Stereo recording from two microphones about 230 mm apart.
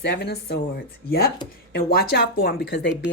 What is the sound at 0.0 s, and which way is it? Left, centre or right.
Speech, left.